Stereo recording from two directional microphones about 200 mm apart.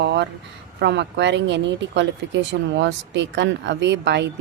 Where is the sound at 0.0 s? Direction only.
60° right (ahead or behind).